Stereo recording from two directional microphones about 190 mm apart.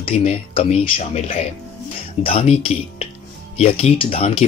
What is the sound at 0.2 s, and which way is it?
Speech, 30° left (ahead or behind).